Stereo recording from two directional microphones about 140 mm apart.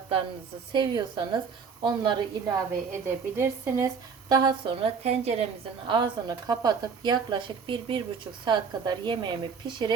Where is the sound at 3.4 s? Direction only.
20° right (ahead or behind).